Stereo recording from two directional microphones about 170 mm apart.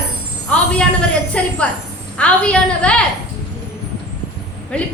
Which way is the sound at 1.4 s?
5° left (ahead or behind).